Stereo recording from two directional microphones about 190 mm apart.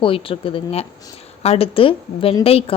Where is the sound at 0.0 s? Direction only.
30° left (ahead or behind).